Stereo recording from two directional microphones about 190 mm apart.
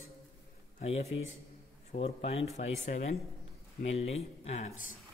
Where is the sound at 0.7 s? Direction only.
35° left (ahead or behind).